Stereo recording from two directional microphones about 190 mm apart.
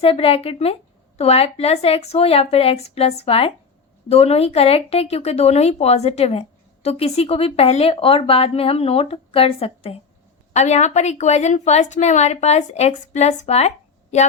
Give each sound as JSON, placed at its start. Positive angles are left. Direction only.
{"t": 0.0, "sound": "speech", "side_deg": 30}